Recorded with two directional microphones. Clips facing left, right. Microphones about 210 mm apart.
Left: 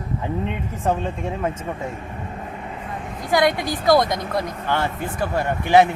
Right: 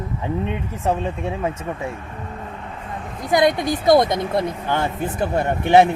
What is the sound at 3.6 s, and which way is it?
A woman's voice, 20° right (ahead or behind).